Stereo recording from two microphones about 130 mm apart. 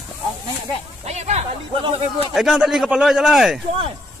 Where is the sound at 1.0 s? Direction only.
60° right (ahead or behind).